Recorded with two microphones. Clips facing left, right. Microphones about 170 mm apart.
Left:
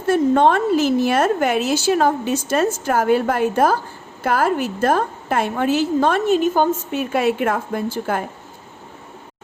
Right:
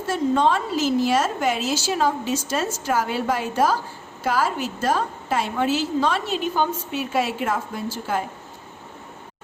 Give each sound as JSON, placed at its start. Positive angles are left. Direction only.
{"t": 0.1, "sound": "a woman's voice", "side_deg": 55}